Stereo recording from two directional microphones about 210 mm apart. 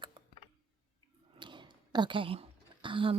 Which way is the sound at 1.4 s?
20° right (ahead or behind).